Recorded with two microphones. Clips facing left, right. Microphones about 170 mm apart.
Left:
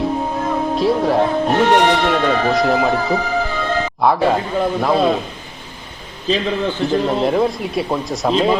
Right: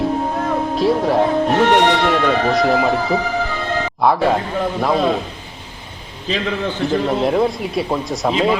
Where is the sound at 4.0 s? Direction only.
Centre (ahead or behind).